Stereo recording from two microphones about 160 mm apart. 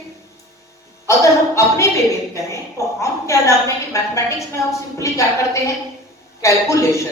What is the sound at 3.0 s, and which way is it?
Speech, 20° left (ahead or behind).